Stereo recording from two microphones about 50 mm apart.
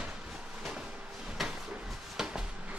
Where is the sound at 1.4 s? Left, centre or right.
Centre.